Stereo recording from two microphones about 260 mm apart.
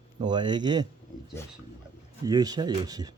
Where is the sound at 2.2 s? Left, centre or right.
Centre.